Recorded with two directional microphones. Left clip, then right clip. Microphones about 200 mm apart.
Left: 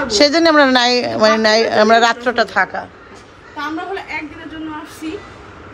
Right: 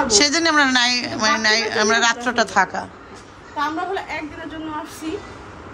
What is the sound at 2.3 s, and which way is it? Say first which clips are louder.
Speech: left 3 dB; 20° right (ahead or behind).